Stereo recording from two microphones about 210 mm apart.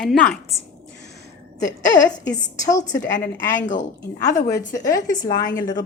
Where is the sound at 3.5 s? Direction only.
40° left (ahead or behind).